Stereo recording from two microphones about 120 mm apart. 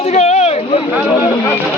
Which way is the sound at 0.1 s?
65° left (ahead or behind).